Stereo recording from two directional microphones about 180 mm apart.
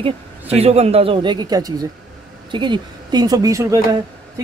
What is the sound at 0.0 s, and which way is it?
A man's voice, 35° right (ahead or behind).